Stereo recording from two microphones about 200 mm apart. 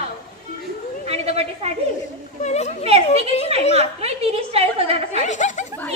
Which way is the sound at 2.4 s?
35° left (ahead or behind).